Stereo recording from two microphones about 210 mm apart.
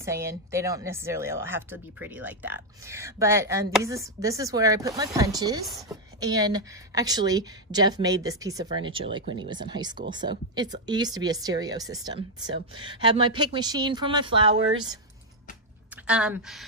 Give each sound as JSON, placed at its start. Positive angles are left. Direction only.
{"t": 0.0, "sound": "speech", "side_deg": -15}
{"t": 5.7, "sound": "a woman's voice", "side_deg": 0}
{"t": 6.1, "sound": "speech", "side_deg": -20}
{"t": 16.1, "sound": "a woman's voice", "side_deg": -5}